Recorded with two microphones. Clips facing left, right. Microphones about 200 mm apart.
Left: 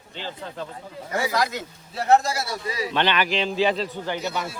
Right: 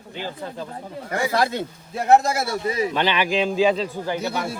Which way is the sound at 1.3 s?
30° right (ahead or behind).